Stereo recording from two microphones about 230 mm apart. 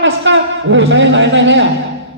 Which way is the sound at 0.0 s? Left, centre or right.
Right.